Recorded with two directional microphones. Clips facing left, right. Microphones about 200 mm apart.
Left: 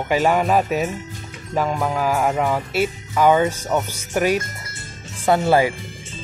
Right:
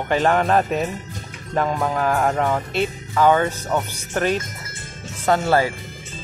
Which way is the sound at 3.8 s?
10° left (ahead or behind).